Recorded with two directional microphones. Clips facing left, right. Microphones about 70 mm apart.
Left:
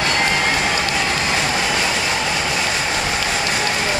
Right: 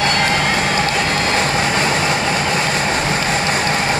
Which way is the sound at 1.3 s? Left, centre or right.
Right.